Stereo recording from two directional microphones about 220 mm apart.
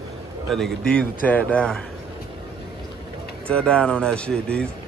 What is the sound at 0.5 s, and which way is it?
Speech, 5° left (ahead or behind).